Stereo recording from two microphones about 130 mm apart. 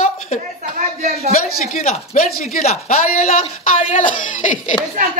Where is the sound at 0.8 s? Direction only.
75° right (ahead or behind).